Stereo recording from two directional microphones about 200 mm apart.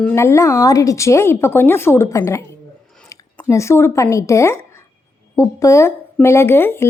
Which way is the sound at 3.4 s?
15° left (ahead or behind).